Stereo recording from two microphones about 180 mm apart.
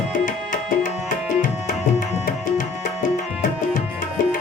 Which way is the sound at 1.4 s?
45° left (ahead or behind).